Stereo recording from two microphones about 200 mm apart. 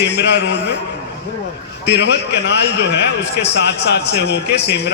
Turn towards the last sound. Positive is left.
turn(degrees=55)  # may be behind; listen again after turning